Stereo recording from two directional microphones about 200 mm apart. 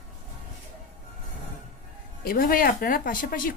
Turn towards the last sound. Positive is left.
turn(degrees=45)  # may be behind; listen again after turning